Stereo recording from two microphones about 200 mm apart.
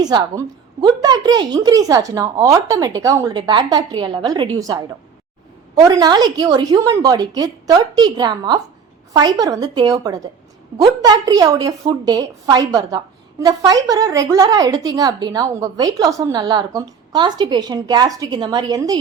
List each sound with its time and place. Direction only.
0.0 s a woman's voice: 20° right (ahead or behind)